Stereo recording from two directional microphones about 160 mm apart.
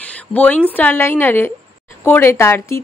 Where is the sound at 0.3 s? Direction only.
10° left (ahead or behind).